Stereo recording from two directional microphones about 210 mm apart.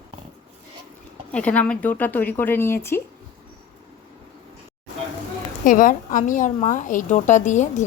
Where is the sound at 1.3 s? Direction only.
5° left (ahead or behind).